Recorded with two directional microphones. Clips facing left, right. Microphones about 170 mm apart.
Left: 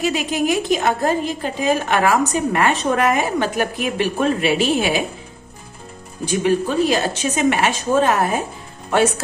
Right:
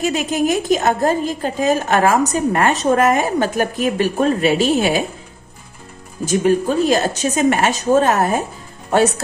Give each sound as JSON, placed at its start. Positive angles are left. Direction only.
{"t": 0.0, "sound": "a woman's voice", "side_deg": -45}
{"t": 6.2, "sound": "a woman's voice", "side_deg": -45}